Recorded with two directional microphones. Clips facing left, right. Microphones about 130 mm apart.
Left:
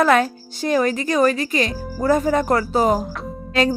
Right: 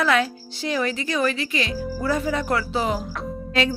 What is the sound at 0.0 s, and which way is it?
Speech, 45° left (ahead or behind).